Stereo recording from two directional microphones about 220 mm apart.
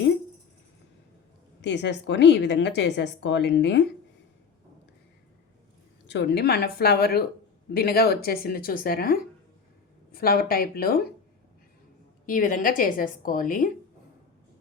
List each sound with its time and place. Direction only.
1.6 s a woman's voice: 50° left (ahead or behind)
6.1 s a woman's voice: 50° left (ahead or behind)
12.2 s a woman's voice: 40° left (ahead or behind)